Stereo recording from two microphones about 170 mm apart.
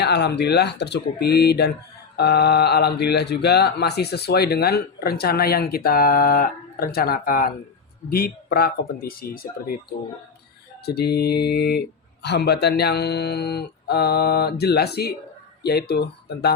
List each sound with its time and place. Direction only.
0.0 s speech: 80° left; by 9.7 s 60° left (ahead or behind)
10.8 s speech: 70° left (ahead or behind)